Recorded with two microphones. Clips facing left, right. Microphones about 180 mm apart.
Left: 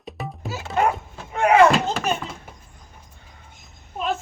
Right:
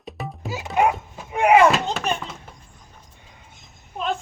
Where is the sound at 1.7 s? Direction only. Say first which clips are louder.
Left 2 dB; centre (ahead or behind).